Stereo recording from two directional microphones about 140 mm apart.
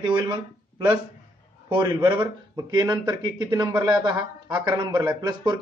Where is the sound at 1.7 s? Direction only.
35° right (ahead or behind).